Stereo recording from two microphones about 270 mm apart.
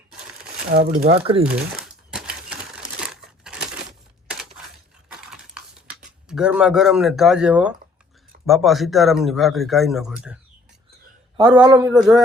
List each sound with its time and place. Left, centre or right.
0.1 s crumpling: centre
0.7 s speech: right
1.1 s speech: right
1.5 s crumpling: centre
5.0 s crushing: centre
6.2 s a man's voice: centre
11.3 s a man's voice: centre